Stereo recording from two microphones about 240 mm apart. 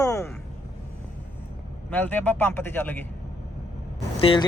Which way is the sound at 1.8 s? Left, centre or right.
Centre.